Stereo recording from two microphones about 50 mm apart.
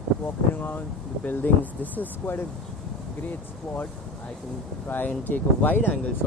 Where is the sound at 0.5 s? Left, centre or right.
Left.